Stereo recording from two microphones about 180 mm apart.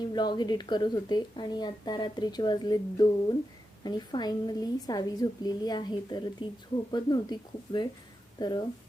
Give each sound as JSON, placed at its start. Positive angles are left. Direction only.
{"t": 0.1, "sound": "a woman's voice", "side_deg": 25}